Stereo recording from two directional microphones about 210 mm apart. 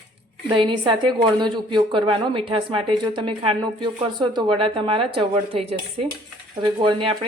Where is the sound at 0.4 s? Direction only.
20° right (ahead or behind).